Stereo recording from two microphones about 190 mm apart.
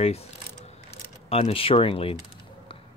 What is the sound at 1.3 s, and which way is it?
Speech, 30° left (ahead or behind).